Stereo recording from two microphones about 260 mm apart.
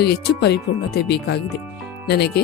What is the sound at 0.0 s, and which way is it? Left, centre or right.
Speech, left.